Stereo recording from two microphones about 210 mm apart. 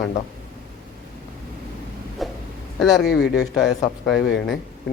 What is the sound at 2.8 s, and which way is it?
A man's voice, centre (ahead or behind).